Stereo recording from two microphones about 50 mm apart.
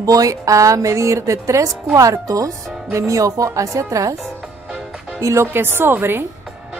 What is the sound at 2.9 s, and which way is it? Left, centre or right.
Speech, right.